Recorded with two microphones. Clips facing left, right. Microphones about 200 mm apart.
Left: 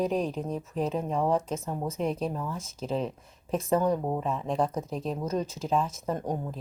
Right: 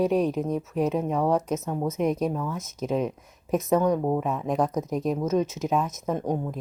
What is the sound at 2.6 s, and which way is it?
Speech, 35° left (ahead or behind).